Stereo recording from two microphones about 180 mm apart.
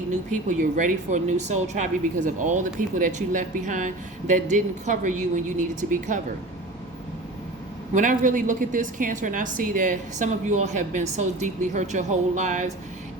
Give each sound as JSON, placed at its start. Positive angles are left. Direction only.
{"t": 0.3, "sound": "a woman's voice", "side_deg": -45}
{"t": 7.9, "sound": "a woman's voice", "side_deg": -45}